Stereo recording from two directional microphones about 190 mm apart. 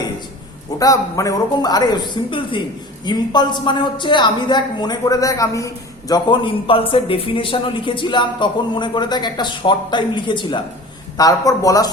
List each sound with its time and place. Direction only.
0.8 s a woman's voice: 15° left (ahead or behind)